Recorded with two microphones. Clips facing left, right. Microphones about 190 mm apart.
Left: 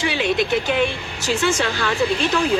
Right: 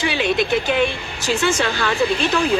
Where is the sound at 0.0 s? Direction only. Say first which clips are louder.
Right 1 dB; 65° right (ahead or behind).